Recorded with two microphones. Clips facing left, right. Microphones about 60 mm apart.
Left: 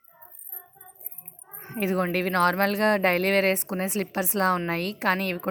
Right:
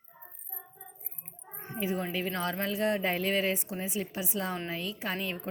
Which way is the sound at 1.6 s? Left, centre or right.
Left.